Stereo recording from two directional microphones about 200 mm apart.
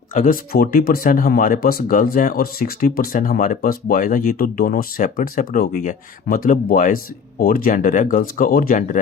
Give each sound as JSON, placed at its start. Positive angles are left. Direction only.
{"t": 0.1, "sound": "speech", "side_deg": 45}